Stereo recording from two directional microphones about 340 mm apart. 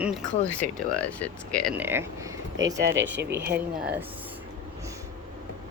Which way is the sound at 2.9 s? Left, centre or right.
Right.